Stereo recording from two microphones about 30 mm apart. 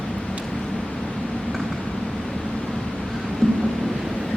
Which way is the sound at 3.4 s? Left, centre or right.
Left.